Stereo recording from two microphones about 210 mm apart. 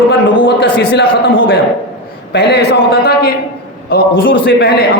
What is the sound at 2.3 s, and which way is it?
A man's voice, 50° left (ahead or behind).